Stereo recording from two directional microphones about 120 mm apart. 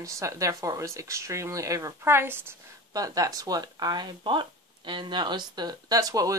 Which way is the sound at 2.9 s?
30° right (ahead or behind).